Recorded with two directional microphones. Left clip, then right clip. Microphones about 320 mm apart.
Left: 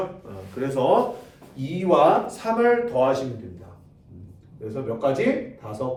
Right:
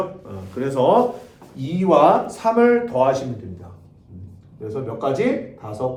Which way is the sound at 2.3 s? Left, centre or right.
Centre.